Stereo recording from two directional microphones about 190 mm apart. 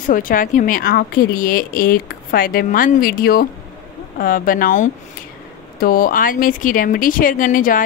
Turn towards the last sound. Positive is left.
turn(degrees=45)  # may be behind; listen again after turning